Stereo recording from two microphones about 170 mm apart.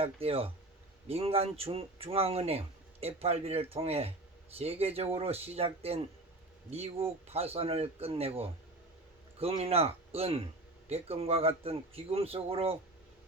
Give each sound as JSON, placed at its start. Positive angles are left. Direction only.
{"t": 0.0, "sound": "speech", "side_deg": -35}